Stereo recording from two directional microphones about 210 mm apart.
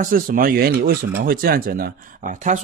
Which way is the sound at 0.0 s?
40° right (ahead or behind).